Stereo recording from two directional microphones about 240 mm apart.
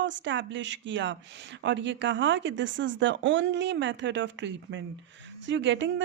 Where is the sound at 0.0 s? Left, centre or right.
Right.